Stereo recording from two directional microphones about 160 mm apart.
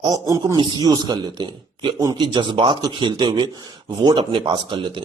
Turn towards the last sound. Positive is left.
turn(degrees=-30)  # may be behind; listen again after turning